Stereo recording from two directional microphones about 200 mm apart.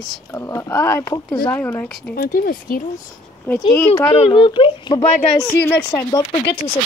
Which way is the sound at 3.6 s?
25° left (ahead or behind).